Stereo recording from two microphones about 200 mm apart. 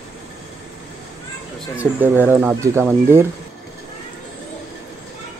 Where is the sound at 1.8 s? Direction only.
10° right (ahead or behind).